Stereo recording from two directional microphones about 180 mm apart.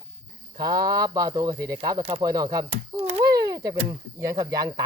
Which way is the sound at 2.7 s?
35° right (ahead or behind).